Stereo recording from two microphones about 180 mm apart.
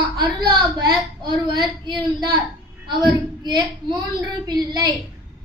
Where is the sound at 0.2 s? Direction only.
25° right (ahead or behind).